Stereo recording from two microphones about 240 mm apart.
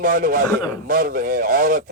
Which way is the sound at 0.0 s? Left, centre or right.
Right.